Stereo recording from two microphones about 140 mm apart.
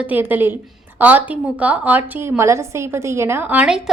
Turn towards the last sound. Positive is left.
turn(degrees=-5)  # may be behind; listen again after turning